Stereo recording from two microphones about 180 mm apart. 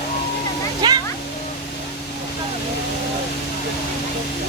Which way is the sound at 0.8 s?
20° right (ahead or behind).